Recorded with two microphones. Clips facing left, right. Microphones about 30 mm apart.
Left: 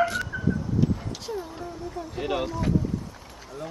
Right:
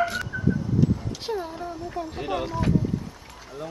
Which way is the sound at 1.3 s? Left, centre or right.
Right.